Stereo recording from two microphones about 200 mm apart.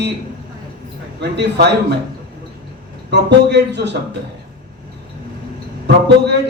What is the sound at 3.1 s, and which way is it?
Speech, 60° right (ahead or behind).